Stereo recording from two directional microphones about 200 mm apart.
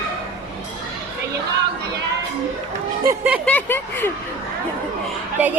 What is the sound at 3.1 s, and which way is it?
Speech, 5° right (ahead or behind).